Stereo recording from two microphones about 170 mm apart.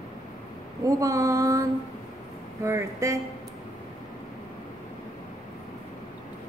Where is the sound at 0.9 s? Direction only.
20° right (ahead or behind).